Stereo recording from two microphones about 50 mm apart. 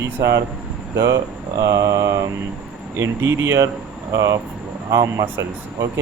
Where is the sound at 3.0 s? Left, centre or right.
Right.